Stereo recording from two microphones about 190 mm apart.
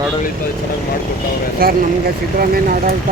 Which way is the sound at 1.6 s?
50° right (ahead or behind).